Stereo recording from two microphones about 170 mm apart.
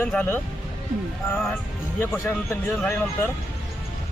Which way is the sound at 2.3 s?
10° left (ahead or behind).